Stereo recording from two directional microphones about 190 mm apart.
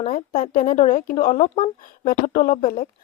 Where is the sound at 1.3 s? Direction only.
35° left (ahead or behind).